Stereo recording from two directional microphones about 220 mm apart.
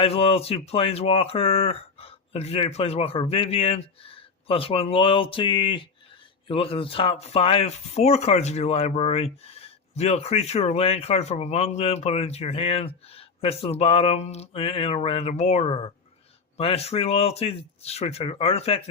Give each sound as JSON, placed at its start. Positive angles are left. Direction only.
{"t": 0.0, "sound": "speech", "side_deg": 25}